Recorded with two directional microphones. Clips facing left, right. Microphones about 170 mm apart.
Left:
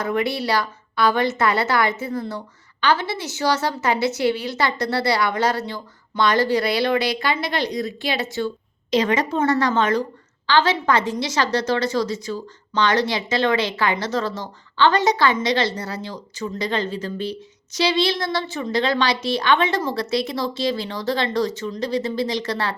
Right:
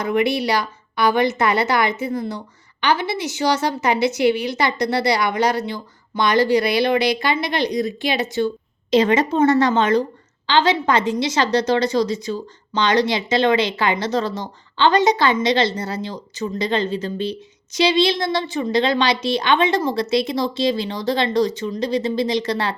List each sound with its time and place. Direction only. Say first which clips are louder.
0.0 s a woman's voice: right 3 dB; 15° right (ahead or behind)